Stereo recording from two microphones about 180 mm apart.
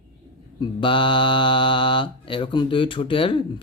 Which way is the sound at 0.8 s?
25° left (ahead or behind).